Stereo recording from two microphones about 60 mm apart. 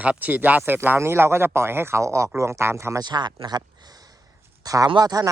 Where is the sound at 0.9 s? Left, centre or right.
Right.